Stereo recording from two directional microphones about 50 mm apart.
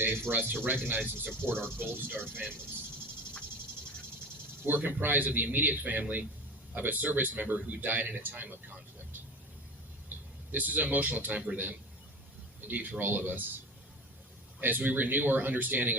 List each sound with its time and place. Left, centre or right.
0.0 s speech: right
4.6 s speech: right
10.1 s a sound: right
10.5 s speech: right
12.6 s speech: right
14.8 s speech: right